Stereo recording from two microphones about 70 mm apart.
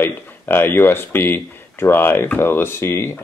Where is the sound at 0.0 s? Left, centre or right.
Left.